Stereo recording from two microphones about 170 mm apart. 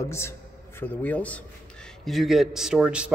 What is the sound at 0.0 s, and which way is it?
A man's voice, 15° left (ahead or behind).